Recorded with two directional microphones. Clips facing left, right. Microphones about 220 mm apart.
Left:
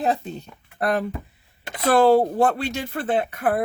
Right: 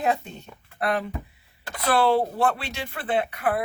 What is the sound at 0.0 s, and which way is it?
Speech, 35° left (ahead or behind).